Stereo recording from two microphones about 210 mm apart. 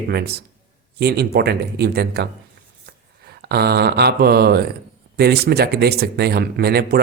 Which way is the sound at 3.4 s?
50° right (ahead or behind).